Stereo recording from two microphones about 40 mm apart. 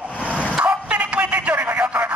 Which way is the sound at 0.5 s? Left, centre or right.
Right.